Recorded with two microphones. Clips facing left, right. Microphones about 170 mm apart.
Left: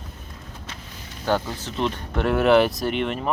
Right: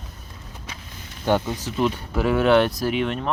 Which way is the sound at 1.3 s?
15° right (ahead or behind).